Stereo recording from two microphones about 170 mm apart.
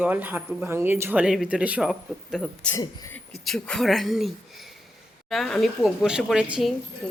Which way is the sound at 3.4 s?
Centre (ahead or behind).